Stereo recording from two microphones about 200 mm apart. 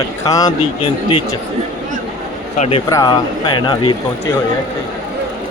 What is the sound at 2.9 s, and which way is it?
Speech, 15° left (ahead or behind).